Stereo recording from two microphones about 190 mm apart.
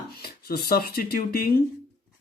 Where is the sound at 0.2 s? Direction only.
55° left (ahead or behind).